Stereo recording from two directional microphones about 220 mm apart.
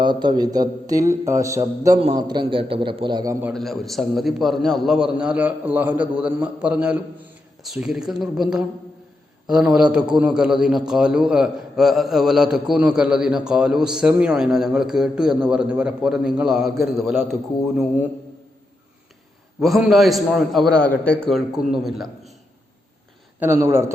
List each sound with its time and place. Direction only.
0.0 s a man's voice: 20° right (ahead or behind)
3.5 s a man's voice: centre (ahead or behind)
19.5 s a man's voice: centre (ahead or behind)
23.4 s a man's voice: 10° right (ahead or behind)